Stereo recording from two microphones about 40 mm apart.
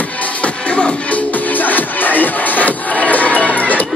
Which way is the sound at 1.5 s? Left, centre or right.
Left.